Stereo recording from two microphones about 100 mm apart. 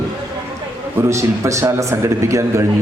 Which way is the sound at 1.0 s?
30° right (ahead or behind).